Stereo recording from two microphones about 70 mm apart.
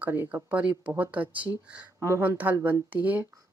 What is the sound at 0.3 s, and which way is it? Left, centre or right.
Speech, right.